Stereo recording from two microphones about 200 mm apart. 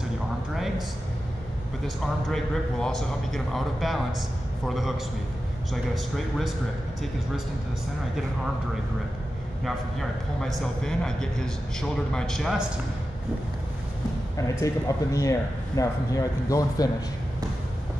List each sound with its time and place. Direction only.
0.6 s a sound: centre (ahead or behind)
2.2 s a man's voice: centre (ahead or behind)
5.9 s a man's voice: centre (ahead or behind)
9.7 s a man's voice: centre (ahead or behind)
14.3 s speech: 15° left (ahead or behind)